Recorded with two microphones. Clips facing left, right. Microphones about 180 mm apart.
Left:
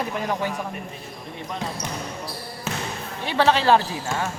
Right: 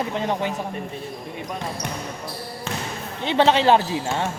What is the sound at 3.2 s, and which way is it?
Speech, 20° right (ahead or behind).